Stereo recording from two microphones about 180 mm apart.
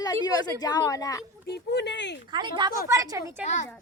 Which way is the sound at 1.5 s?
70° left (ahead or behind).